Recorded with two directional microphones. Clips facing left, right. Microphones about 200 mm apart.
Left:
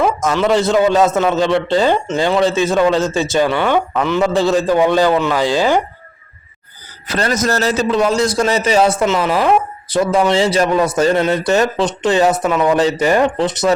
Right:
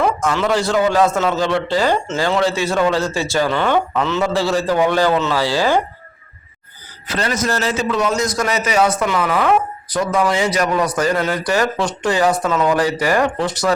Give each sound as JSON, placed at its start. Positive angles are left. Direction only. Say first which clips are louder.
{"t": 0.0, "sound": "a sound", "louder": "left 2 dB", "side_deg": 20}
{"t": 0.5, "sound": "a man's voice", "louder": "left 4 dB", "side_deg": 20}
{"t": 7.1, "sound": "a man's voice", "louder": "left 3 dB", "side_deg": 40}